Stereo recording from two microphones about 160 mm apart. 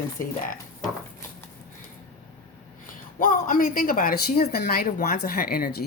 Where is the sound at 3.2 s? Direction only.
60° left (ahead or behind).